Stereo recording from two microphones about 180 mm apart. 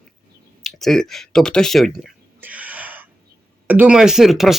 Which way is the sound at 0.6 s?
Centre (ahead or behind).